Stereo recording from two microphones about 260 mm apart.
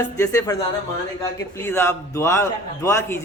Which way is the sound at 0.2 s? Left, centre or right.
Centre.